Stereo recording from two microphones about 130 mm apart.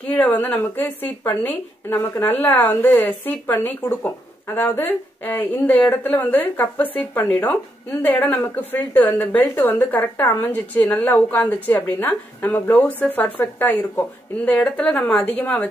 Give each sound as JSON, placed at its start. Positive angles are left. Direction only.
{"t": 0.0, "sound": "a woman's voice", "side_deg": 10}